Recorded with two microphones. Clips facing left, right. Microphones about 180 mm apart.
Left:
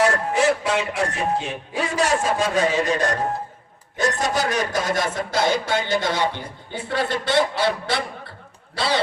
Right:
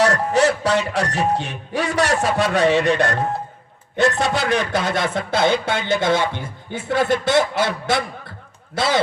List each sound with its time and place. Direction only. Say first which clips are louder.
0.0 s speech: right 2 dB; 75° right (ahead or behind); by 8.0 s 50° right (ahead or behind)